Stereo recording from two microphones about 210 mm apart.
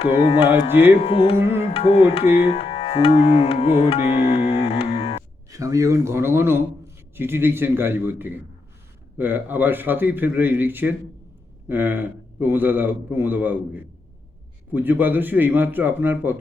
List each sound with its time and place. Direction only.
0.2 s music: 30° left (ahead or behind)
5.5 s speech: 15° right (ahead or behind)